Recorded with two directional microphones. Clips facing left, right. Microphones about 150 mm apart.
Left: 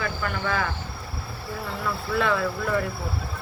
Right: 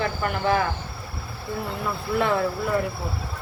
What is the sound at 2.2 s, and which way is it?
Speech, 25° right (ahead or behind).